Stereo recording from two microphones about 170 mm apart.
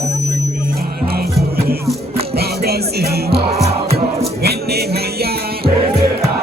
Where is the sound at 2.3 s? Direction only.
65° right (ahead or behind).